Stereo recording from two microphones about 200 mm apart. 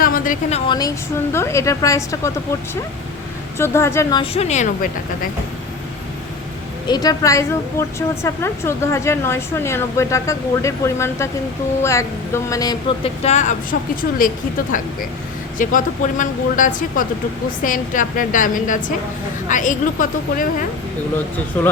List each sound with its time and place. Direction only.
0.0 s a sound: 45° left (ahead or behind)
0.5 s a woman's voice: 20° left (ahead or behind)
3.6 s a woman's voice: 15° left (ahead or behind)
4.2 s speech: 35° left (ahead or behind)
6.8 s a woman's voice: 20° left (ahead or behind)
13.2 s a woman's voice: 35° left (ahead or behind)
15.5 s a woman's voice: 40° left (ahead or behind)